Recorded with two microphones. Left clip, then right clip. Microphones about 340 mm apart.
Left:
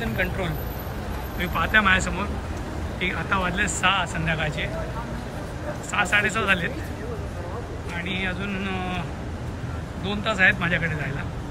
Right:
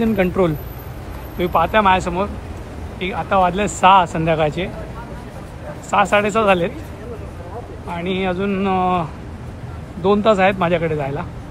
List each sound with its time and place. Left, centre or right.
0.0 s speech: centre
5.9 s speech: centre
7.9 s speech: centre
10.0 s speech: centre